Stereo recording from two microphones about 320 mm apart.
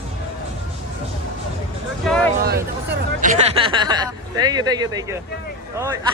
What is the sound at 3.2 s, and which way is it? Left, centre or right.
Speech, centre.